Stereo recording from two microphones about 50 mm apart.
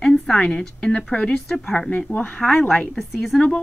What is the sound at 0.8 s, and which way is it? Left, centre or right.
Speech, left.